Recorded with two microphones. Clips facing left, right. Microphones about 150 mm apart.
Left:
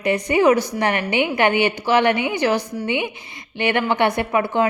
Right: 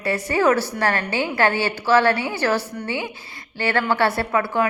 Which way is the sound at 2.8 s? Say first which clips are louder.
Left 4 dB; 20° left (ahead or behind).